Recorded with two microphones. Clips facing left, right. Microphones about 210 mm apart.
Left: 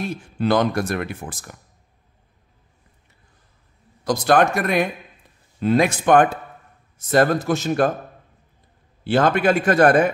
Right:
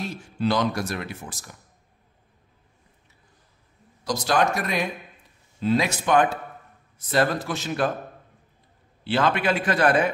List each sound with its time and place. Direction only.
0.0 s speech: 55° left (ahead or behind)
4.0 s a man's voice: 55° left (ahead or behind)
9.0 s a man's voice: 45° left (ahead or behind)